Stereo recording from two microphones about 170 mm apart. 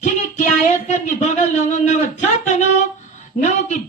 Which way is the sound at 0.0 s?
45° left (ahead or behind).